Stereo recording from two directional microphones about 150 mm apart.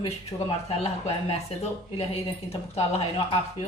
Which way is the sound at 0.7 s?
40° left (ahead or behind).